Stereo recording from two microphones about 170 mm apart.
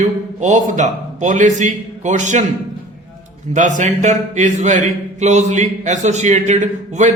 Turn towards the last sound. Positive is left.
turn(degrees=-45)  # may be behind; listen again after turning